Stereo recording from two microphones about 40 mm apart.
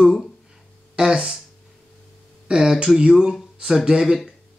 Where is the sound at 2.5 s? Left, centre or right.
Centre.